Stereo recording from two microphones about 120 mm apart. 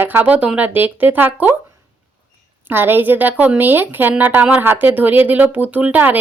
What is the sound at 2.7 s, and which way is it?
A woman's voice, 15° right (ahead or behind).